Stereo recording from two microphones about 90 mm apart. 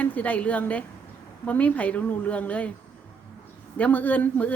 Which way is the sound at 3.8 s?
15° left (ahead or behind).